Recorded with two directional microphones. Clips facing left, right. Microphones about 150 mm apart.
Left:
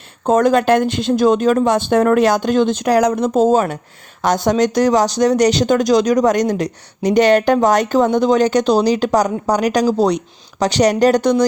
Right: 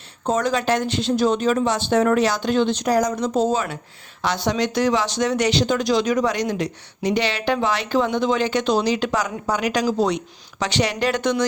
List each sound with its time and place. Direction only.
0.3 s speech: 50° left (ahead or behind)
2.8 s speech: 65° left (ahead or behind); by 11.4 s 35° left (ahead or behind)